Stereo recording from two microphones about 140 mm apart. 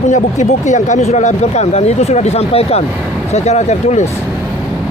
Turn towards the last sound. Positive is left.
turn(degrees=55)  # may be behind; listen again after turning